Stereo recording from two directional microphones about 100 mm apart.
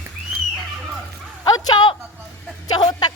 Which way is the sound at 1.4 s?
40° left (ahead or behind).